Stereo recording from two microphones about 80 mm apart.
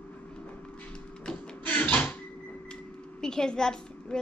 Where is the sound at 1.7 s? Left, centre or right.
Centre.